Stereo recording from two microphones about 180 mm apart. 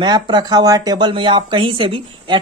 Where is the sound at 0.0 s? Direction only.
25° right (ahead or behind).